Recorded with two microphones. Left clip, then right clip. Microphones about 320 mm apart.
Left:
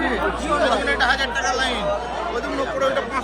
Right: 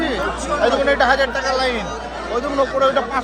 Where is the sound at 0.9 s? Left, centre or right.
Right.